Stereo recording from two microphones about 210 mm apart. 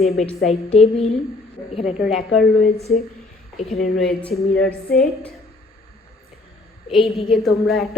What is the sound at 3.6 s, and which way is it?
Speech, 35° left (ahead or behind).